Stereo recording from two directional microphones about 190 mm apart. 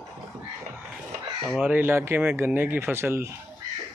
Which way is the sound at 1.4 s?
10° right (ahead or behind).